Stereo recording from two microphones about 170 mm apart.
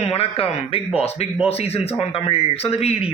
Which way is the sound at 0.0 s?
35° left (ahead or behind).